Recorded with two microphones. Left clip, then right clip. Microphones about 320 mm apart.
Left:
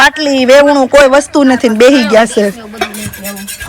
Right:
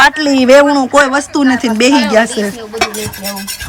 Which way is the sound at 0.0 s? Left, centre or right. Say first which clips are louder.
Left 1 dB; centre.